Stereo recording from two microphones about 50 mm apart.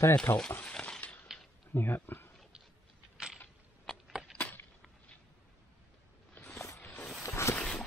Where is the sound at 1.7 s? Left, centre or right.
Left.